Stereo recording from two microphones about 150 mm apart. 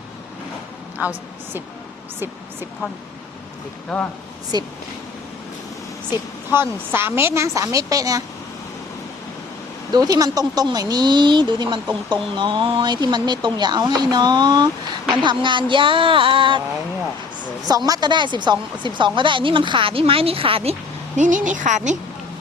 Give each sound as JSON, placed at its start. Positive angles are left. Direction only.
{"t": 3.9, "sound": "speech", "side_deg": 5}
{"t": 4.5, "sound": "speech", "side_deg": -25}
{"t": 6.5, "sound": "speech", "side_deg": -15}
{"t": 9.9, "sound": "speech", "side_deg": -25}
{"t": 17.7, "sound": "speech", "side_deg": -25}
{"t": 21.2, "sound": "a woman's voice", "side_deg": -60}